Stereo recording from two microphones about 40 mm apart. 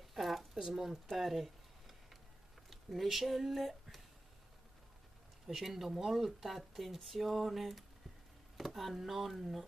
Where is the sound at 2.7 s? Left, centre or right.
Centre.